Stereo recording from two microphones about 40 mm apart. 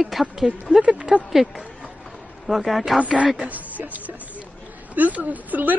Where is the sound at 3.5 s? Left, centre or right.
Right.